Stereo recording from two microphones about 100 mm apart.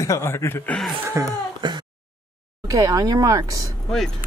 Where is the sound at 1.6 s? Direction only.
50° right (ahead or behind).